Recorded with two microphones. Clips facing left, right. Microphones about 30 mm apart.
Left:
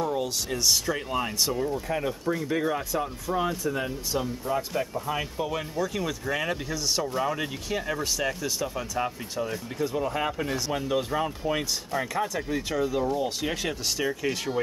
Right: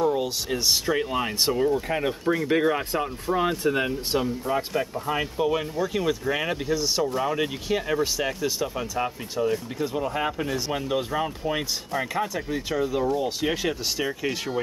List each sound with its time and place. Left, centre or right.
0.0 s speech: centre; by 4.2 s right
4.2 s speech: right
5.2 s speech: centre